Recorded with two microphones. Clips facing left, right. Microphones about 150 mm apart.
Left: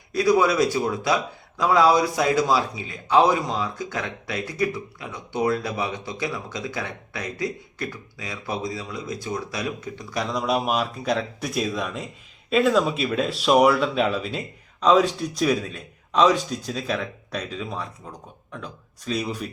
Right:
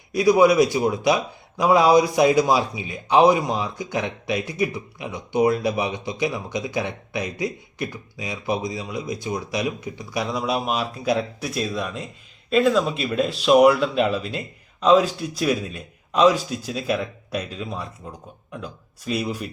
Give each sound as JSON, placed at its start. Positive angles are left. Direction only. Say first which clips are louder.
{"t": 0.1, "sound": "speech", "louder": "right 4 dB", "side_deg": -15}